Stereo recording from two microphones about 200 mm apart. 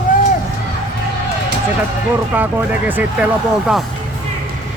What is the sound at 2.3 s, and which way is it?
Speech, 10° right (ahead or behind).